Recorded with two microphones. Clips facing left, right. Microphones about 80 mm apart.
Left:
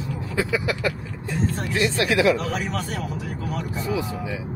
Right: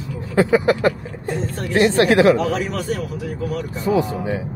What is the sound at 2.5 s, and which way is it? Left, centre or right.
Speech, centre.